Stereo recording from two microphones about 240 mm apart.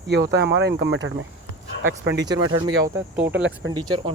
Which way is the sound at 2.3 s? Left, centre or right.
Centre.